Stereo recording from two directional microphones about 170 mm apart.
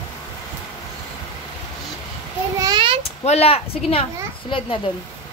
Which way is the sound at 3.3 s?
35° left (ahead or behind).